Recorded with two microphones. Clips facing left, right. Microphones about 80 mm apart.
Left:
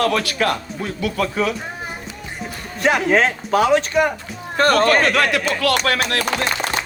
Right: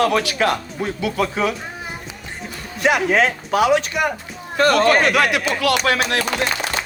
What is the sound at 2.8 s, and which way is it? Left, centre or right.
A man's voice, left.